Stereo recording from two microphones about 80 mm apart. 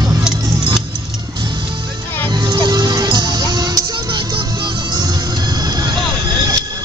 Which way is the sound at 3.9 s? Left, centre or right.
Right.